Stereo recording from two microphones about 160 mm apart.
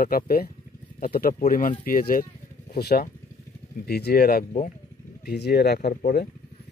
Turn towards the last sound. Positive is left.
turn(degrees=70)  # may be behind; listen again after turning